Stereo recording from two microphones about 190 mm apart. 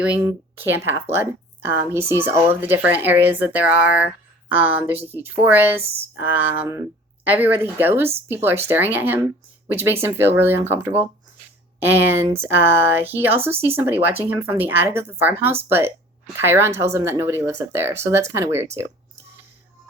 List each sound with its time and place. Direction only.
0.2 s speech: 15° right (ahead or behind)
5.8 s speech: 30° right (ahead or behind)
6.1 s speech: 10° right (ahead or behind)